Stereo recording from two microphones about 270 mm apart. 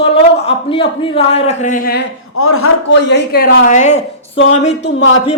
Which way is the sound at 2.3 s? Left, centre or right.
Left.